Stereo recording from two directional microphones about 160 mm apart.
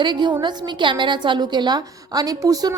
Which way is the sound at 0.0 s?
30° right (ahead or behind).